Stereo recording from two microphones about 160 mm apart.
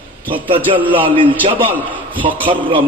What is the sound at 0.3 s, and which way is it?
Music, 35° right (ahead or behind).